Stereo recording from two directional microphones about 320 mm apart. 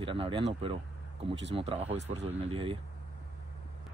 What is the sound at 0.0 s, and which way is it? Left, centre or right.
Speech, centre.